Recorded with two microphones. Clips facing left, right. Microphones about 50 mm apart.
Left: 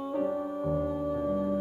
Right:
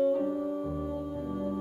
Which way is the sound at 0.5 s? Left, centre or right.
Left.